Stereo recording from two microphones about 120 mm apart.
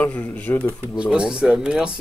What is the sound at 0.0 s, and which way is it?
Speech, 15° left (ahead or behind).